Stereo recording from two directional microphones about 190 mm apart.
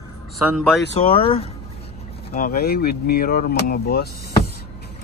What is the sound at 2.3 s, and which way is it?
Speech, 50° left (ahead or behind).